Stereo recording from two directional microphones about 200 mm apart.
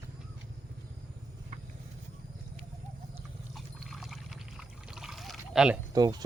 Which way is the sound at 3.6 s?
Centre (ahead or behind).